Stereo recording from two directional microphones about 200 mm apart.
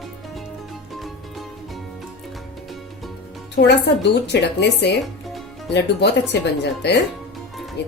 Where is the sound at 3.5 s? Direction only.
60° left (ahead or behind).